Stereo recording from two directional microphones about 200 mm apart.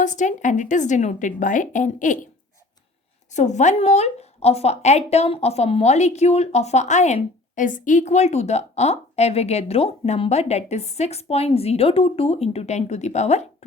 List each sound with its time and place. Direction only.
0.0 s speech: 40° left (ahead or behind)
3.3 s speech: 35° left (ahead or behind)